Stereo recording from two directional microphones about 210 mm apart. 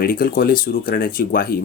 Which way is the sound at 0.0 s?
45° left (ahead or behind).